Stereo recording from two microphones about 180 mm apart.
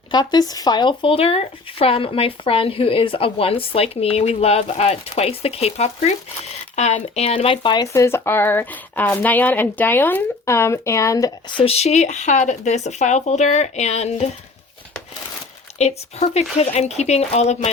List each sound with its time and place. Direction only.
0.1 s speech: 25° left (ahead or behind)
15.8 s speech: 35° left (ahead or behind)